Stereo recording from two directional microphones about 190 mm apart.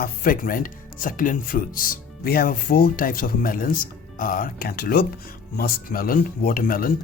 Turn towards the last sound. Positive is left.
turn(degrees=50)  # may be behind; listen again after turning